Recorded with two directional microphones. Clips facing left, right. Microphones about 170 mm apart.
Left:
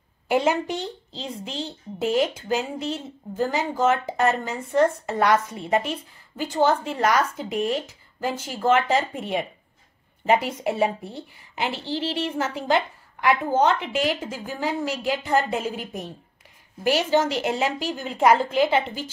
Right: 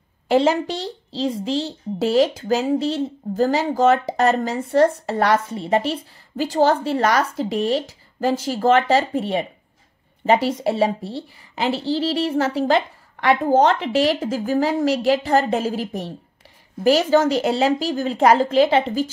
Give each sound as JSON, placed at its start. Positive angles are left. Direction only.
{"t": 0.3, "sound": "a woman's voice", "side_deg": -35}
{"t": 10.2, "sound": "a woman's voice", "side_deg": -35}